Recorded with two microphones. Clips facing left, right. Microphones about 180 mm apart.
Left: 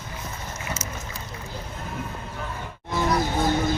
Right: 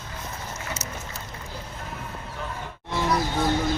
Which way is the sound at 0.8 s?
70° right (ahead or behind).